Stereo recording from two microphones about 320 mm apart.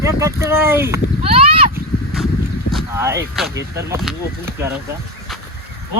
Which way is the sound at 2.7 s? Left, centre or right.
Centre.